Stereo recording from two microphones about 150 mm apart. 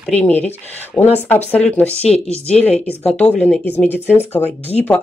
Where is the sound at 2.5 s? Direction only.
10° left (ahead or behind).